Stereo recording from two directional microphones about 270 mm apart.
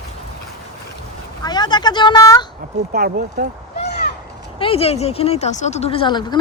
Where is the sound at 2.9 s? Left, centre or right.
Right.